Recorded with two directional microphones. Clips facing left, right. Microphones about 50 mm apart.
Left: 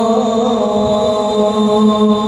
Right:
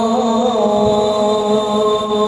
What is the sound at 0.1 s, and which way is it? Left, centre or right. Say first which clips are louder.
Music: left 1 dB; right.